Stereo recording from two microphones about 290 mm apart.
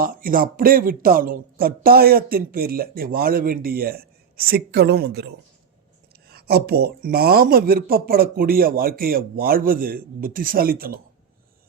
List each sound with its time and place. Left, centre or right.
0.0 s speech: right